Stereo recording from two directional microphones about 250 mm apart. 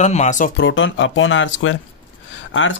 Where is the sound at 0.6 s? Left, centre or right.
Left.